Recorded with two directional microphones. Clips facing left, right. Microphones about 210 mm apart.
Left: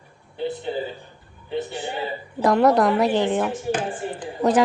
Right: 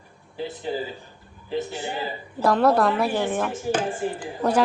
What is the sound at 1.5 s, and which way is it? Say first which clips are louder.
Speech: even; centre (ahead or behind).